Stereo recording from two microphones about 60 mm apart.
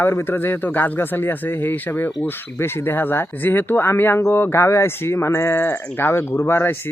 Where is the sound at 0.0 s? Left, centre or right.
Left.